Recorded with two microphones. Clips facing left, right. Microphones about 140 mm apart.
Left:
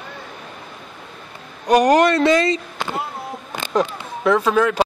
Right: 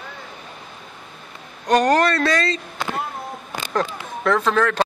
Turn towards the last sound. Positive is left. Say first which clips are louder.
# left 2 dB
turn(degrees=10)  # may be behind; listen again after turning